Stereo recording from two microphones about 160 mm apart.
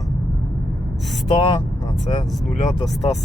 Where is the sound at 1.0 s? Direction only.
Centre (ahead or behind).